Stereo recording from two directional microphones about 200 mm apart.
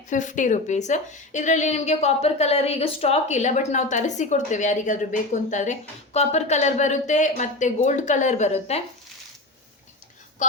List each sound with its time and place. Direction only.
0.1 s a woman's voice: 40° left (ahead or behind)